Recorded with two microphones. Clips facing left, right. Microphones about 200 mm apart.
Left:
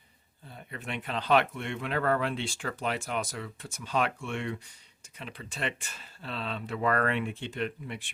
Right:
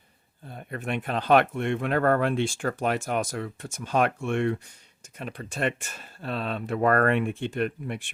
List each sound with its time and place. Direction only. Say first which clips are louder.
0.4 s speech: right 7 dB; 50° right (ahead or behind)